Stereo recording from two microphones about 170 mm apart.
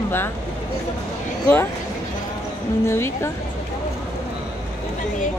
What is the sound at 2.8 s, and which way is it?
Speech, 15° left (ahead or behind).